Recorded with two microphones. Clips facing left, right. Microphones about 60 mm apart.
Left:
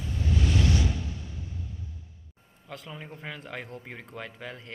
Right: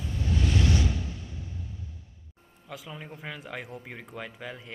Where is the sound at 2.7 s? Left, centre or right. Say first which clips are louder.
Even; centre.